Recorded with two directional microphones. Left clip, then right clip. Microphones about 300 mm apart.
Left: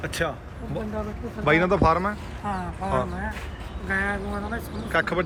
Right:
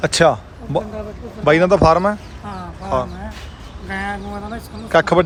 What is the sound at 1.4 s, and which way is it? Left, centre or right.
Speech, centre.